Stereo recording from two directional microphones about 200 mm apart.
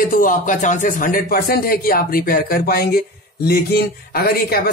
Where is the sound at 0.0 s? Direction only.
45° left (ahead or behind).